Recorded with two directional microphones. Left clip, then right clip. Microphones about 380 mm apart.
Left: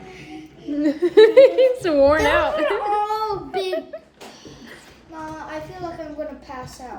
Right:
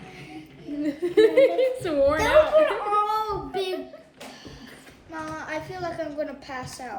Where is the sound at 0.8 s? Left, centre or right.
Left.